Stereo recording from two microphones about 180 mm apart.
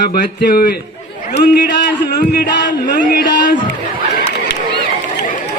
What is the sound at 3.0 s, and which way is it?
Speech, 50° left (ahead or behind).